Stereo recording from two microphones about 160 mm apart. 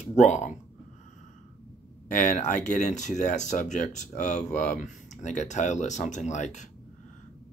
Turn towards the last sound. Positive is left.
turn(degrees=50)  # may be behind; listen again after turning